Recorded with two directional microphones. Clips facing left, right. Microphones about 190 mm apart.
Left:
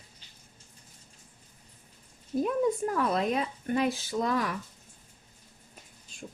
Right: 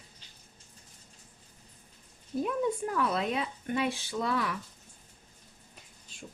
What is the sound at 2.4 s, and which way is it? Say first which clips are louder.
Speech: left 3 dB; 45° left (ahead or behind).